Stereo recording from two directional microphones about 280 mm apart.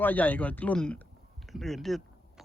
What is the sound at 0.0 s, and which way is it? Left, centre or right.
Speech, centre.